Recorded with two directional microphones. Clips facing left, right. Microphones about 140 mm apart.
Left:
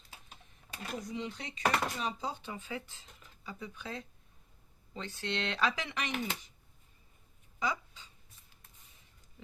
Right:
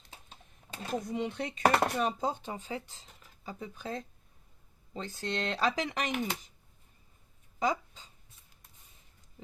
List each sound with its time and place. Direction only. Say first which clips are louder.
0.1 s a sound: right 1 dB; 25° right (ahead or behind)
1.0 s speech: right 6 dB; 55° right (ahead or behind)
7.6 s speech: right 5 dB; 45° right (ahead or behind)